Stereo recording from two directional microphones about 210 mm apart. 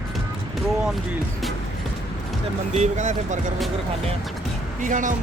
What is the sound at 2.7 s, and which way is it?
Speech, 35° right (ahead or behind).